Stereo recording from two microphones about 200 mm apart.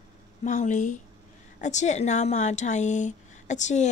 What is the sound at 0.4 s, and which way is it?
A woman's voice, 40° left (ahead or behind).